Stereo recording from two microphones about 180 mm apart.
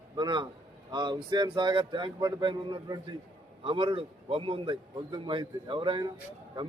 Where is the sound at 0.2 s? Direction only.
25° right (ahead or behind).